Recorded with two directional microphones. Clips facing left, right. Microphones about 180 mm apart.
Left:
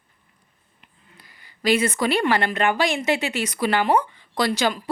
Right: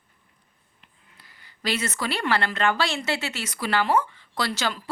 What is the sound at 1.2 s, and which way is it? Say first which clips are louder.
Speech: left 8 dB; 15° left (ahead or behind).